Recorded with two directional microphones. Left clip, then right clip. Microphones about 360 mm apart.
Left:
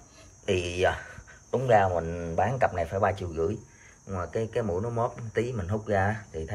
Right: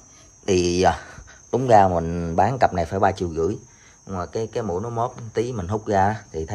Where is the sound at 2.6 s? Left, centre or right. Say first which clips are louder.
Right 6 dB; centre.